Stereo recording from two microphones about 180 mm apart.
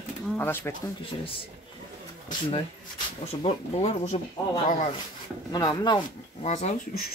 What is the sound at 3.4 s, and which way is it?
Speech, 35° left (ahead or behind).